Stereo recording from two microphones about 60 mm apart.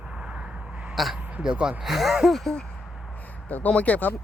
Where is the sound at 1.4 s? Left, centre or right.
Centre.